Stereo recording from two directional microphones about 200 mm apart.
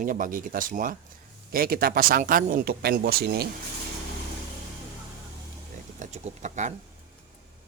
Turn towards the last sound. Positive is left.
turn(degrees=-35)  # may be behind; listen again after turning